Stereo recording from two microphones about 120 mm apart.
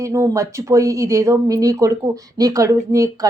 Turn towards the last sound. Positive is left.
turn(degrees=-25)  # may be behind; listen again after turning